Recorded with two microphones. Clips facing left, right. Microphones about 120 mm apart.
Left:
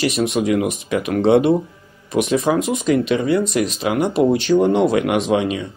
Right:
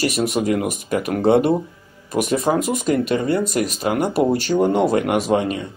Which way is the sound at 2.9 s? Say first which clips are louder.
Left 2 dB; 50° right (ahead or behind).